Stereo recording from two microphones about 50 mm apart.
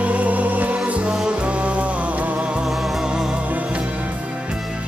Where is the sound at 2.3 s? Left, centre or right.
Centre.